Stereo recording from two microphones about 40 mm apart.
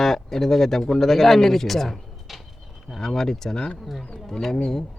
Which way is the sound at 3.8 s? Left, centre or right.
Centre.